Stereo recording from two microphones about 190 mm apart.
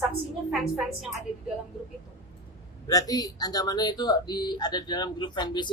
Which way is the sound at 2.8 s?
20° left (ahead or behind).